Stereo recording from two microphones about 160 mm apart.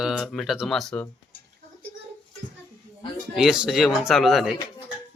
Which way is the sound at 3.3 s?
5° right (ahead or behind).